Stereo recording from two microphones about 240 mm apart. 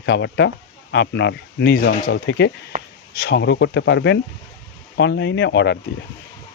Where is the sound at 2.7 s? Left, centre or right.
Right.